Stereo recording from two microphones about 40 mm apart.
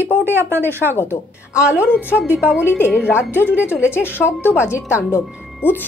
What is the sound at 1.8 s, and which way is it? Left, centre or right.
A woman's voice, left.